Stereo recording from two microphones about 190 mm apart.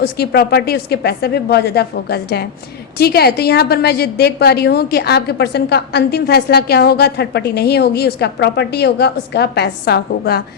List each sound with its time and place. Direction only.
0.0 s a woman's voice: 55° left (ahead or behind)